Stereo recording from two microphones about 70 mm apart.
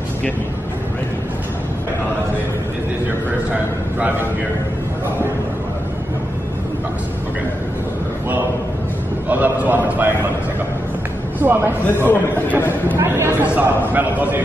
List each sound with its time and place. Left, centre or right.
9.3 s a man's voice: right
11.3 s a man's voice: right
12.1 s speech: left
12.9 s speech: right
13.4 s a man's voice: right